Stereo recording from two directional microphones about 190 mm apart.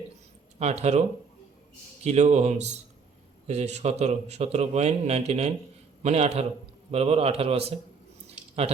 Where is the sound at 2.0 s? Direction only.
35° right (ahead or behind).